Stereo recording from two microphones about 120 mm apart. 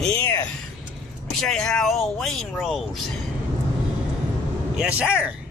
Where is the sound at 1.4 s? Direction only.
5° left (ahead or behind).